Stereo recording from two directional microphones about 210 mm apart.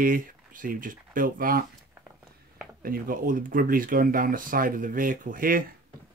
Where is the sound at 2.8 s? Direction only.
45° right (ahead or behind).